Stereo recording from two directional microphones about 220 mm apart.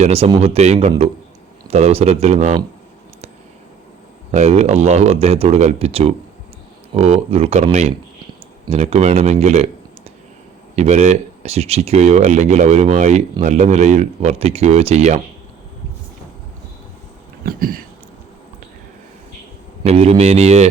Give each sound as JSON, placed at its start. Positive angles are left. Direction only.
{"t": 0.0, "sound": "speech", "side_deg": -25}
{"t": 4.3, "sound": "speech", "side_deg": -30}
{"t": 10.8, "sound": "speech", "side_deg": -30}
{"t": 17.4, "sound": "a sound", "side_deg": -40}
{"t": 19.8, "sound": "speech", "side_deg": -30}